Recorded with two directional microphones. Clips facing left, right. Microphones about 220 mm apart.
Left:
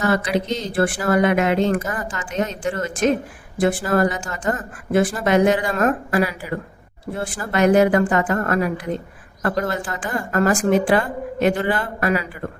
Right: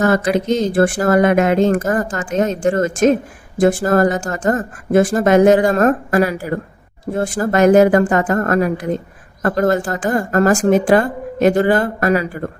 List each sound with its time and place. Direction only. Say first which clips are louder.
0.0 s speech: right 5 dB; 45° right (ahead or behind)